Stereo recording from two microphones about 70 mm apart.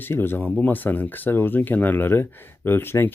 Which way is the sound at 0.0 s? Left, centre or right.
Left.